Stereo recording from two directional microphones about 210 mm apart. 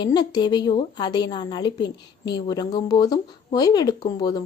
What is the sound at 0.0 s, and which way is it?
A woman's voice, 20° left (ahead or behind).